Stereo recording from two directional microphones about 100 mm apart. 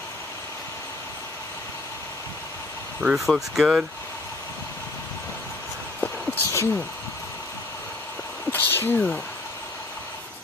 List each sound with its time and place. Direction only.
3.0 s speech: 5° right (ahead or behind)
5.9 s a sound: 20° left (ahead or behind)
8.5 s speech: 20° left (ahead or behind)